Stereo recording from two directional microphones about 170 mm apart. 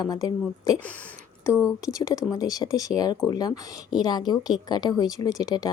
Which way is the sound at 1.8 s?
20° left (ahead or behind).